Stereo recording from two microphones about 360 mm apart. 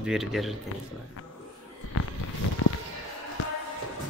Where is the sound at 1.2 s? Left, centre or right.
Left.